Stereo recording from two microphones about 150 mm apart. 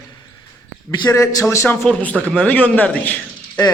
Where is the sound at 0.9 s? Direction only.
30° left (ahead or behind); by 3.2 s 10° left (ahead or behind).